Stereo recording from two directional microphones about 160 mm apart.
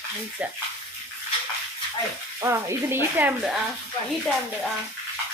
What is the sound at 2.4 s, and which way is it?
Speech, 15° right (ahead or behind).